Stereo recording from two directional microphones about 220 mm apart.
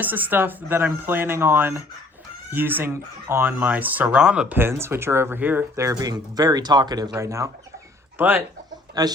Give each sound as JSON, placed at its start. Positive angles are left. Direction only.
{"t": 0.0, "sound": "speech", "side_deg": -10}